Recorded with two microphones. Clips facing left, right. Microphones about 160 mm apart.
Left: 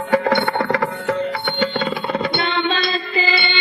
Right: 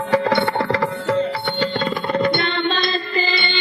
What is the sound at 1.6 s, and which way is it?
Music, 45° right (ahead or behind).